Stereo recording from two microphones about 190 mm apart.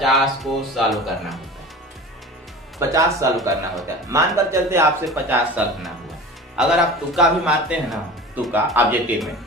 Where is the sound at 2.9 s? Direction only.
15° right (ahead or behind).